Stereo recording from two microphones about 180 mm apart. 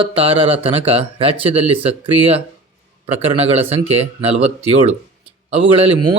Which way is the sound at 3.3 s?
35° right (ahead or behind).